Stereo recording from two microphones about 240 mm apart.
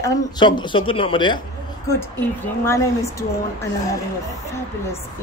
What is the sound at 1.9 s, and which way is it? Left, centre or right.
Speech, centre.